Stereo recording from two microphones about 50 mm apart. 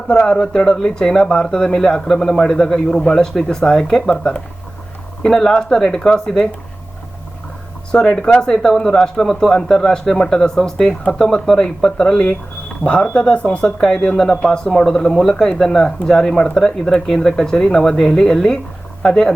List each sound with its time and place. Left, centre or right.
0.1 s speech: centre
7.9 s speech: centre
14.2 s speech: centre